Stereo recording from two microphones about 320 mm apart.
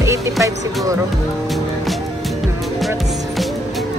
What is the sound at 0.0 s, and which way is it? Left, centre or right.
Speech, centre.